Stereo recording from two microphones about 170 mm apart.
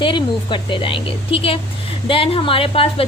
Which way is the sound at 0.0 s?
30° left (ahead or behind).